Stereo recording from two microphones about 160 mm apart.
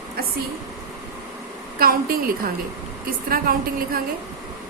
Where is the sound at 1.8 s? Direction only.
65° right (ahead or behind).